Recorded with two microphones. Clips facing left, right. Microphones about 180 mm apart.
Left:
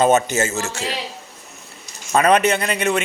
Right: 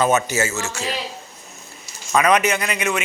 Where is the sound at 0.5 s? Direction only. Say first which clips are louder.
Left 1 dB; 30° left (ahead or behind).